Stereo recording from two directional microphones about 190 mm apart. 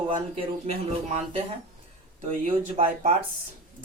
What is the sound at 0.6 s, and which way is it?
Speech, 30° right (ahead or behind).